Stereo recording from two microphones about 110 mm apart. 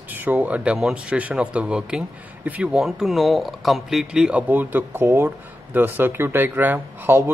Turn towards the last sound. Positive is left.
turn(degrees=-20)  # may be behind; listen again after turning